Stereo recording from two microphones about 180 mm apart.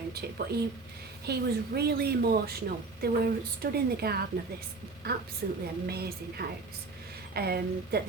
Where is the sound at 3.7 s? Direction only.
60° right (ahead or behind).